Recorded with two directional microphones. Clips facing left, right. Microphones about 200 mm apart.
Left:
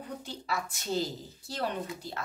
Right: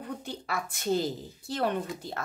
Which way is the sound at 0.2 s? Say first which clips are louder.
Right 1 dB; 55° right (ahead or behind).